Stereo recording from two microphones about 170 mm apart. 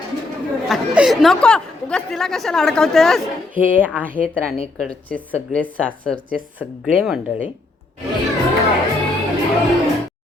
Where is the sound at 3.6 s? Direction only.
10° right (ahead or behind).